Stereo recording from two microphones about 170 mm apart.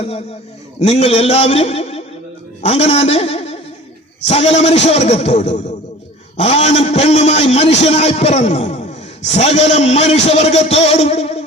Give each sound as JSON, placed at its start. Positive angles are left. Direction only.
{"t": 0.8, "sound": "a man's voice", "side_deg": 40}